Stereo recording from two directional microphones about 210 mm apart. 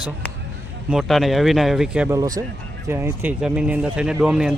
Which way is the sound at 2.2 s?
20° right (ahead or behind).